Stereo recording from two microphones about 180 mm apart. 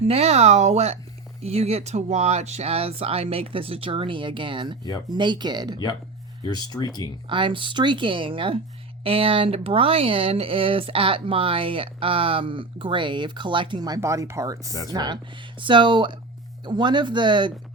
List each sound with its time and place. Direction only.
0.0 s speech: 35° right (ahead or behind)
6.4 s speech: 20° left (ahead or behind)
7.3 s speech: 25° right (ahead or behind)